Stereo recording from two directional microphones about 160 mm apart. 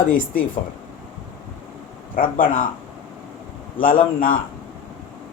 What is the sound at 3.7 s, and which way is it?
Speech, 60° left (ahead or behind).